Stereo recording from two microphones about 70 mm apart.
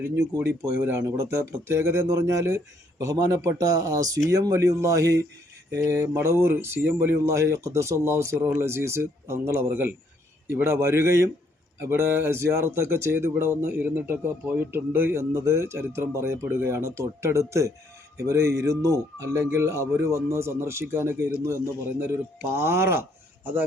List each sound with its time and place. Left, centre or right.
0.0 s speech: right
1.0 s speech: right
3.0 s speech: right
6.2 s speech: right
22.5 s speech: right